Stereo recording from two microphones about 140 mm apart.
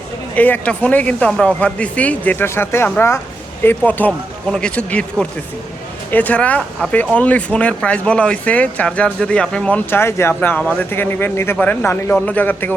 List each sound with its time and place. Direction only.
0.3 s speech: 10° left (ahead or behind)
6.1 s speech: 10° left (ahead or behind)